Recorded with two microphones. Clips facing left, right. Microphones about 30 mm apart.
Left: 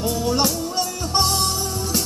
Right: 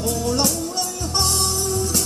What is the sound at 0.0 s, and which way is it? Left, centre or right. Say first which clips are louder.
Music: left 1 dB; centre.